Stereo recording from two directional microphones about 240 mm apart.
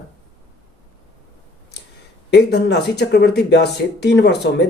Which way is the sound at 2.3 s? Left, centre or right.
Left.